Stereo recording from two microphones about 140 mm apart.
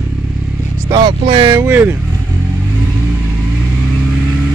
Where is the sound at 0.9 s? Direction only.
35° right (ahead or behind).